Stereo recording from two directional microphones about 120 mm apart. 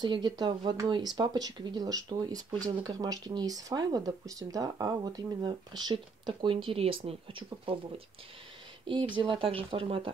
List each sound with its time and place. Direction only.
0.0 s speech: 35° right (ahead or behind)
8.8 s speech: 45° right (ahead or behind)